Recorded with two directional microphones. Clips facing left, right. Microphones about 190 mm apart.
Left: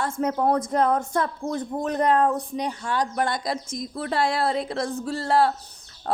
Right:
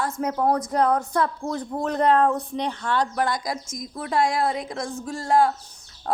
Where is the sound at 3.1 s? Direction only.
25° left (ahead or behind).